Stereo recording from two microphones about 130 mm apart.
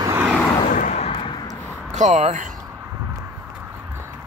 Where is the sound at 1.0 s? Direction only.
45° left (ahead or behind).